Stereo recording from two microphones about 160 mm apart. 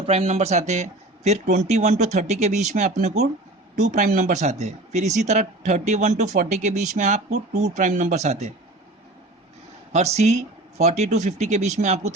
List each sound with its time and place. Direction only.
0.0 s speech: 40° right (ahead or behind)
9.9 s speech: 45° right (ahead or behind)